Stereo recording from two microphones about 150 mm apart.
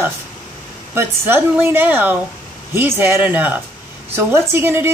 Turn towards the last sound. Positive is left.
turn(degrees=-15)  # may be behind; listen again after turning